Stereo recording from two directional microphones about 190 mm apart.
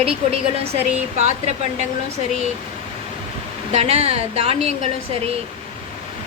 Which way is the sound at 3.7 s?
35° right (ahead or behind).